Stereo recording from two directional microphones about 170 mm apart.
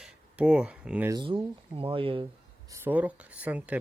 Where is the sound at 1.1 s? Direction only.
25° right (ahead or behind).